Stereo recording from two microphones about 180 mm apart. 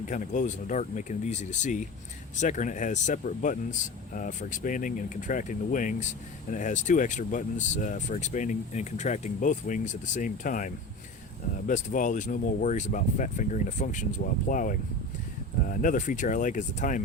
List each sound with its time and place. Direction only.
0.0 s speech: 45° left (ahead or behind)
11.7 s speech: 45° left (ahead or behind)